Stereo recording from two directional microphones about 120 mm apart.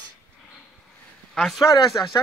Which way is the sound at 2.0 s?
30° left (ahead or behind).